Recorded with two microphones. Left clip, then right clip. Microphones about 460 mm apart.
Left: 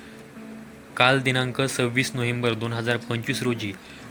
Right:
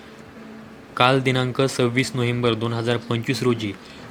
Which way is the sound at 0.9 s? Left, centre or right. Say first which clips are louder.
Right 2 dB; left.